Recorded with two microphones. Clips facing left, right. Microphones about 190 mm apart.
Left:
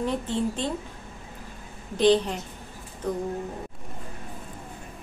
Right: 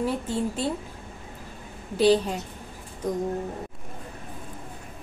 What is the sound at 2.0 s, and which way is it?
Speech, 10° right (ahead or behind).